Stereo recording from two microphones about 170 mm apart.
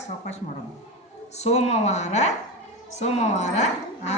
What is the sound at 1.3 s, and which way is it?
A woman's voice, 40° left (ahead or behind).